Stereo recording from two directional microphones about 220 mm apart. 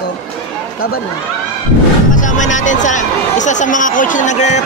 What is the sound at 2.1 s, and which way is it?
Speech, 35° left (ahead or behind).